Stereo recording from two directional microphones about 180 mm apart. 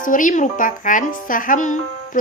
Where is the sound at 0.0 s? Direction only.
45° left (ahead or behind).